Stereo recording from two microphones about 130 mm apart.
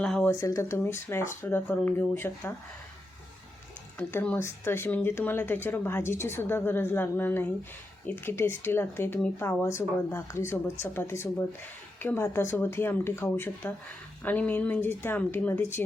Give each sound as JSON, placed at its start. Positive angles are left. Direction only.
{"t": 0.0, "sound": "speech", "side_deg": 5}
{"t": 0.3, "sound": "speech", "side_deg": 25}
{"t": 3.9, "sound": "speech", "side_deg": 10}